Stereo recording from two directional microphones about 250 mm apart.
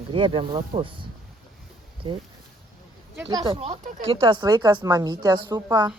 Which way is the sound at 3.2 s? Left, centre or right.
Centre.